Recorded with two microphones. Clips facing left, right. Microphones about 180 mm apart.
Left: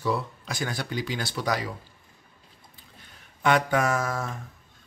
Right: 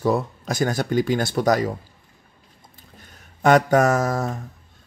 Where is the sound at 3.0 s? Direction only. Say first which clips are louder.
Right 6 dB; 45° right (ahead or behind).